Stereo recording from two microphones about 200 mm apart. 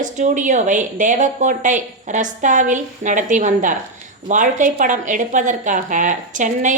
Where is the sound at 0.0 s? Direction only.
40° right (ahead or behind).